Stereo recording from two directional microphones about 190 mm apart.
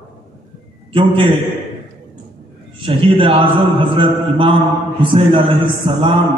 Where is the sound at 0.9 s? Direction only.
25° right (ahead or behind).